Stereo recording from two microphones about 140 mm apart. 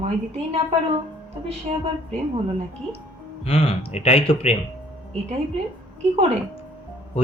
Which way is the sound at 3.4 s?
40° left (ahead or behind).